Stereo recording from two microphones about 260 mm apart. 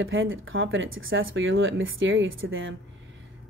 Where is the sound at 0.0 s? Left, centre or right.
Right.